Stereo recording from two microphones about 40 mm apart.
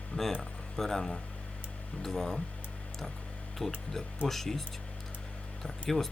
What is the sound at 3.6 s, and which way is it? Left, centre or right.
Speech, left.